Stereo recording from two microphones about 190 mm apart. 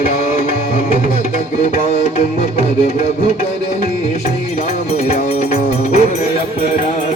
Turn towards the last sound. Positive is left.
turn(degrees=35)  # may be behind; listen again after turning